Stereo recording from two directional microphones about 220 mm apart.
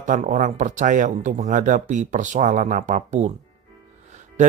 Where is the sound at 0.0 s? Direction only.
35° right (ahead or behind).